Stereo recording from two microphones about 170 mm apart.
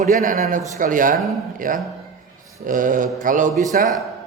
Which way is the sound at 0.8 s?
50° right (ahead or behind).